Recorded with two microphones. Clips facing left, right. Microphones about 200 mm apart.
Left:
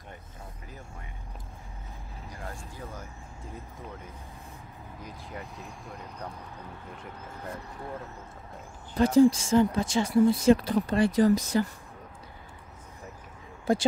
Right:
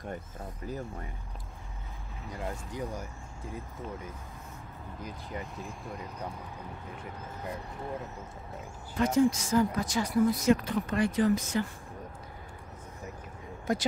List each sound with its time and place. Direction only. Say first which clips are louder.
2.3 s speech: right 6 dB; 20° right (ahead or behind)
5.0 s speech: right 2 dB; centre (ahead or behind)
8.9 s speech: left 5 dB; 30° left (ahead or behind)
13.7 s speech: left 5 dB; 30° left (ahead or behind)